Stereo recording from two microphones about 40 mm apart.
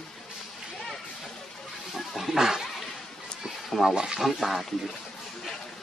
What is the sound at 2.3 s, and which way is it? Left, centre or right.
Speech, centre.